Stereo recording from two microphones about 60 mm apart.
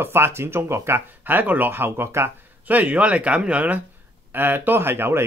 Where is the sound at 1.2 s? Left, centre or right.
Right.